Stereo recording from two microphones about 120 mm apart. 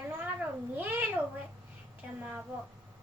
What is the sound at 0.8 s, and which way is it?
Cat, 15° right (ahead or behind).